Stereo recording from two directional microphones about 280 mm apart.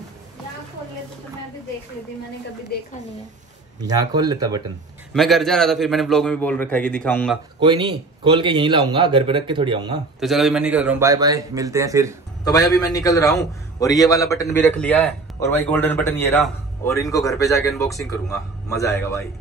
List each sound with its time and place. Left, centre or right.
2.7 s a woman's voice: left
3.8 s a man's voice: centre
5.1 s a man's voice: centre
7.6 s a man's voice: centre
10.2 s a man's voice: centre
12.4 s a man's voice: centre